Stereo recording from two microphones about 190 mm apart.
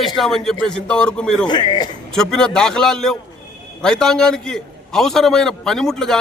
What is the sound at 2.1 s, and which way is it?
A man's voice, 5° left (ahead or behind).